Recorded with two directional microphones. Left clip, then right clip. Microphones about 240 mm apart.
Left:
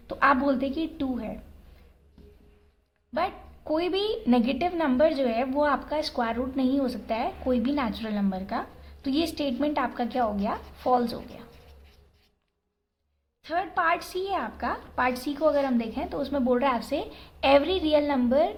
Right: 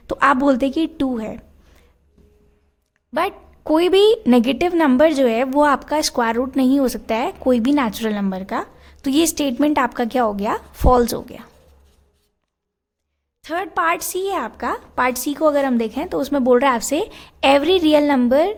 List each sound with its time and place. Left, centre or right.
0.1 s a woman's voice: right
3.2 s a woman's voice: right
13.4 s a woman's voice: right